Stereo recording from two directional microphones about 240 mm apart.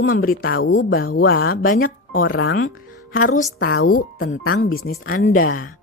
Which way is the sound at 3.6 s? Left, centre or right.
Left.